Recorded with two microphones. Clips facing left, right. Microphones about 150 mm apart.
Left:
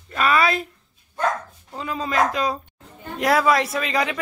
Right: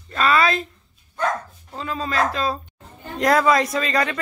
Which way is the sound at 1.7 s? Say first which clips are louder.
Left 1 dB; 15° left (ahead or behind).